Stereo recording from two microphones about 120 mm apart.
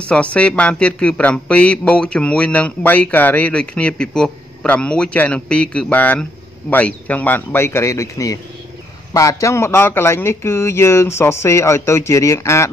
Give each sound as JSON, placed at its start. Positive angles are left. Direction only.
{"t": 0.0, "sound": "a man's voice", "side_deg": 10}